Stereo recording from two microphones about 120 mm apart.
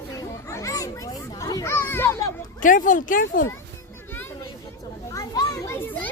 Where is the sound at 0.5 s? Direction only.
25° left (ahead or behind).